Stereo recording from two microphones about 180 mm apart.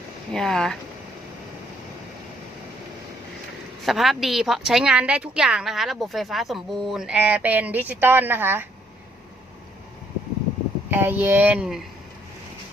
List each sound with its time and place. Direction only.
0.3 s a woman's voice: 5° left (ahead or behind)
3.8 s a woman's voice: centre (ahead or behind)
10.9 s speech: 10° right (ahead or behind)